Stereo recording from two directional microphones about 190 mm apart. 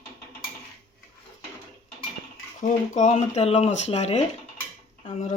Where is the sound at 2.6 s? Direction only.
40° left (ahead or behind).